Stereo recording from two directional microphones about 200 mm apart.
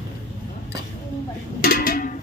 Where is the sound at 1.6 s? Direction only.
50° left (ahead or behind).